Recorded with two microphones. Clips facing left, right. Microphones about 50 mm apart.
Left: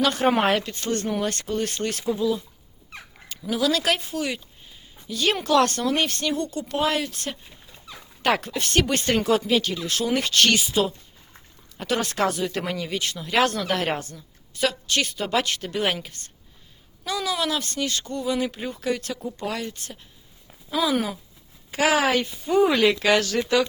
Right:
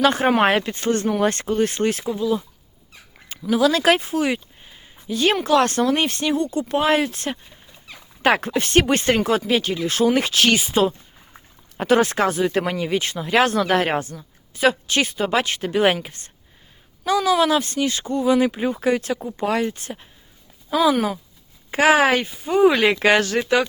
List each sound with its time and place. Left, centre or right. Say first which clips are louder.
0.0 s speech: right 4 dB; right; by 2.4 s centre
3.5 s speech: right 6 dB; right
21.7 s speech: right 5 dB; right